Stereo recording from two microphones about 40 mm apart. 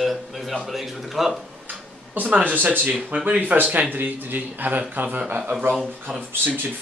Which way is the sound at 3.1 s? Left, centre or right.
Right.